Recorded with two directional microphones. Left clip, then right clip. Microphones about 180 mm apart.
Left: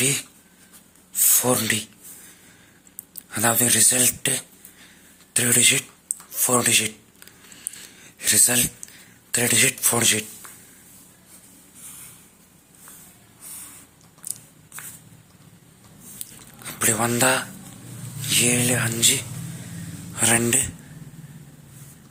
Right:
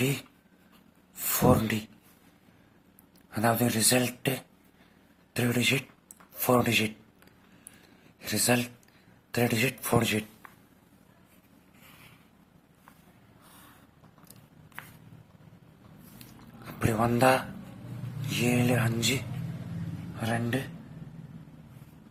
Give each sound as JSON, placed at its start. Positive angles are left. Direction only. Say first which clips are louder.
{"t": 0.0, "sound": "speech", "louder": "left 6 dB", "side_deg": -5}
{"t": 1.1, "sound": "a sound", "louder": "left 3 dB", "side_deg": -5}
{"t": 3.2, "sound": "speech", "louder": "left 5 dB", "side_deg": 0}
{"t": 8.2, "sound": "speech", "louder": "left 6 dB", "side_deg": 0}
{"t": 16.6, "sound": "speech", "louder": "left 5 dB", "side_deg": 0}
{"t": 20.1, "sound": "speech", "louder": "left 10 dB", "side_deg": 20}